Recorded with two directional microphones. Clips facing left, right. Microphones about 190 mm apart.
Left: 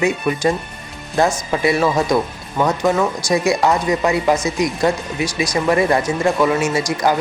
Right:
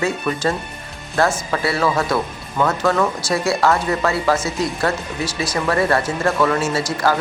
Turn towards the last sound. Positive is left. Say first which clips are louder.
# left 2 dB
turn(degrees=15)  # may be behind; listen again after turning